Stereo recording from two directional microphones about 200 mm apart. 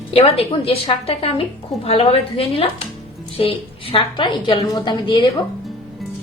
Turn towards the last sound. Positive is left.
turn(degrees=20)  # may be behind; listen again after turning